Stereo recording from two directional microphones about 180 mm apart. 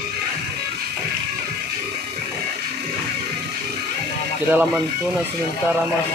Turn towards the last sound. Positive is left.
turn(degrees=-10)  # may be behind; listen again after turning